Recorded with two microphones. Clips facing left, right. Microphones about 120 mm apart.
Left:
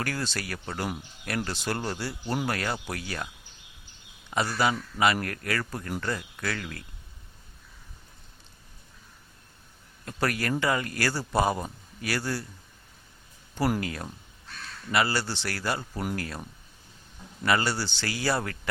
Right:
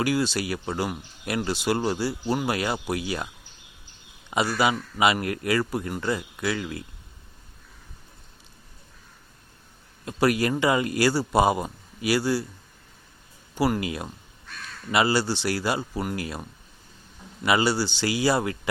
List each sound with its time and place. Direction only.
0.0 s a man's voice: 10° right (ahead or behind)
2.8 s a man's voice: 15° right (ahead or behind)
4.3 s a man's voice: 15° right (ahead or behind)
10.1 s a man's voice: 15° right (ahead or behind)
13.6 s a man's voice: 10° right (ahead or behind)
16.1 s a man's voice: 15° right (ahead or behind)